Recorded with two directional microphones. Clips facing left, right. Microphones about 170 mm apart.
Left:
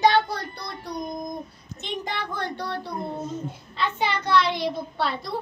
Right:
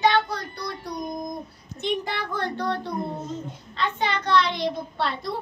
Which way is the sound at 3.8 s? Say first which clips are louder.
Even; 10° left (ahead or behind).